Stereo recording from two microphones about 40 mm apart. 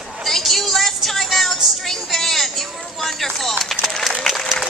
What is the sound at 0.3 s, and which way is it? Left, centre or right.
Music, centre.